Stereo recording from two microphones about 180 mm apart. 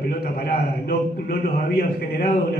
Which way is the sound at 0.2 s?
55° left (ahead or behind).